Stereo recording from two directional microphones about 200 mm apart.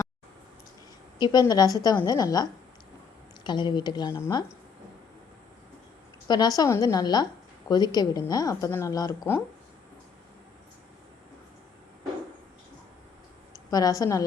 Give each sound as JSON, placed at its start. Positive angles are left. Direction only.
{"t": 1.2, "sound": "a woman's voice", "side_deg": 20}
{"t": 6.2, "sound": "a woman's voice", "side_deg": 20}
{"t": 13.7, "sound": "a woman's voice", "side_deg": 20}